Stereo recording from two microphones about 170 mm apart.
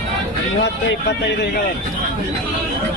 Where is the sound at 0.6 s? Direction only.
90° left.